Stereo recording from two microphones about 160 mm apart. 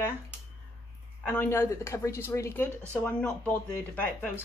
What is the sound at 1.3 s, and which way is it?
Speech, 15° left (ahead or behind).